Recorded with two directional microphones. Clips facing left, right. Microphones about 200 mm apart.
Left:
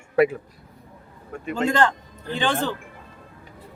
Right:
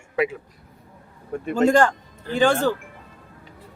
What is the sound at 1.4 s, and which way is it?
Speech, 45° right (ahead or behind).